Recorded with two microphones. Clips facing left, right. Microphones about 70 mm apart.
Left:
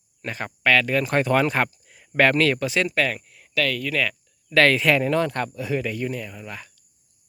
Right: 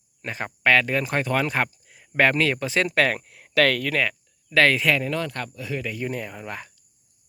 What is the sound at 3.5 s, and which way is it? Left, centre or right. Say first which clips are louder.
Speech: right 4 dB; right.